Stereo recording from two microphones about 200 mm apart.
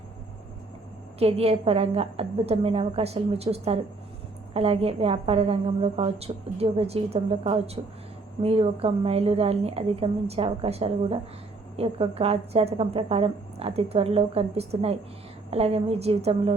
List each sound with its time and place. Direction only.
1.2 s a woman's voice: 30° right (ahead or behind)